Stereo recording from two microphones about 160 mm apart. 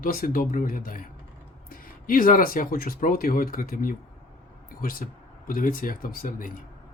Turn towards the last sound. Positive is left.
turn(degrees=60)  # may be behind; listen again after turning